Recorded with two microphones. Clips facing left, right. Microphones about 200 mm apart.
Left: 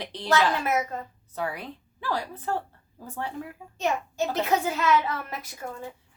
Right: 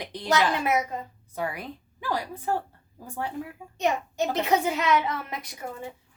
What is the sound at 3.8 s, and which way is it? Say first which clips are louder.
Speech: right 1 dB; 20° right (ahead or behind).